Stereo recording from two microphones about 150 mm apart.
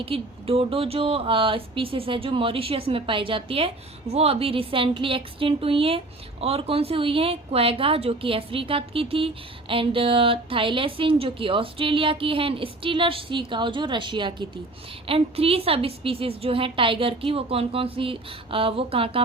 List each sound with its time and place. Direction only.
0.0 s speech: 40° right (ahead or behind)